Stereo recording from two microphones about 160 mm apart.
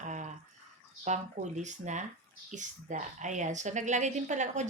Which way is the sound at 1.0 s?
45° right (ahead or behind).